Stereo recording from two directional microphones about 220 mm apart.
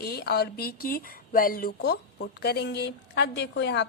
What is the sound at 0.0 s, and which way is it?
Speech, 45° left (ahead or behind).